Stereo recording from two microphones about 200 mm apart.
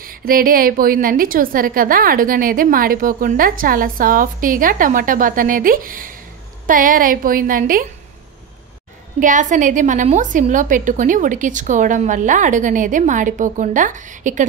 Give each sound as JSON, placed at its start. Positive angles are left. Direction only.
{"t": 0.0, "sound": "a woman's voice", "side_deg": -45}
{"t": 9.2, "sound": "a woman's voice", "side_deg": -40}